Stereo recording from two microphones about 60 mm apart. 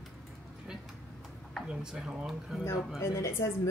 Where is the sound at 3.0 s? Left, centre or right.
Left.